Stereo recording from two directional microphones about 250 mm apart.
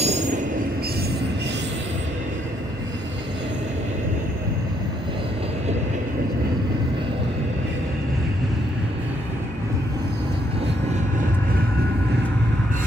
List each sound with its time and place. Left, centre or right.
0.0 s train: right